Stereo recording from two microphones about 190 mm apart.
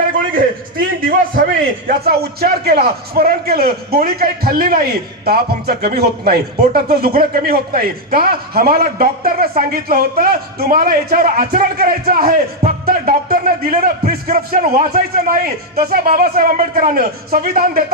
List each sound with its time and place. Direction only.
1.0 s a man's voice: 50° right (ahead or behind)